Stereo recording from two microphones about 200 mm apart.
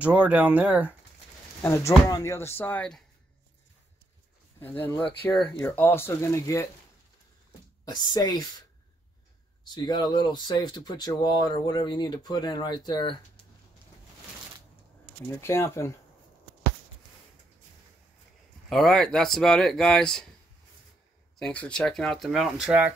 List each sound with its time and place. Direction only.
0.0 s speech: 5° right (ahead or behind)
1.6 s speech: 15° left (ahead or behind)
4.6 s speech: 10° left (ahead or behind)
7.8 s speech: 20° left (ahead or behind)
9.8 s speech: 20° left (ahead or behind)
15.2 s speech: 10° left (ahead or behind)
18.7 s speech: centre (ahead or behind)
21.4 s speech: 5° left (ahead or behind)